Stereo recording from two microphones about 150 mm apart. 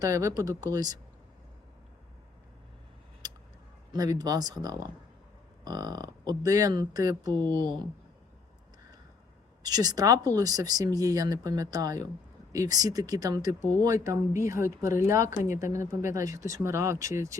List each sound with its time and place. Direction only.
0.0 s speech: 25° right (ahead or behind)
3.2 s a sound: 25° right (ahead or behind)
3.9 s speech: 25° right (ahead or behind)
7.3 s speech: 15° left (ahead or behind)
9.6 s speech: 25° right (ahead or behind)